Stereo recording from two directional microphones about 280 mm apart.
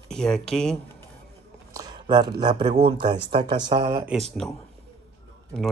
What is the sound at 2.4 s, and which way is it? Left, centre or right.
Speech, centre.